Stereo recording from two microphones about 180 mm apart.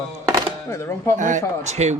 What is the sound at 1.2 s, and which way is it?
Speech, 45° right (ahead or behind).